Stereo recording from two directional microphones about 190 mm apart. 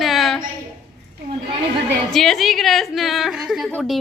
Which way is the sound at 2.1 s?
Centre (ahead or behind).